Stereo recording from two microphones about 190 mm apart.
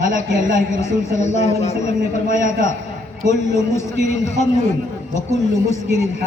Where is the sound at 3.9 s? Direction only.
35° left (ahead or behind).